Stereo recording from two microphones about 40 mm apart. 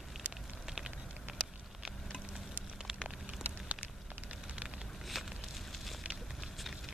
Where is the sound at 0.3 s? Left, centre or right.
Centre.